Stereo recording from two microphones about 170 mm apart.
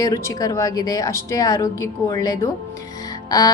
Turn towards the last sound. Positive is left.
turn(degrees=20)  # may be behind; listen again after turning